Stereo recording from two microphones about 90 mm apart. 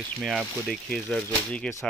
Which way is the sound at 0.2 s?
Centre (ahead or behind).